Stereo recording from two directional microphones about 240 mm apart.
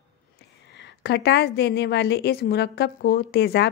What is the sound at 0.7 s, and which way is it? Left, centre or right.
A woman's voice, left.